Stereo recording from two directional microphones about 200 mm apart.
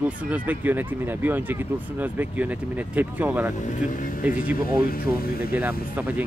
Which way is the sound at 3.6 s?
40° left (ahead or behind).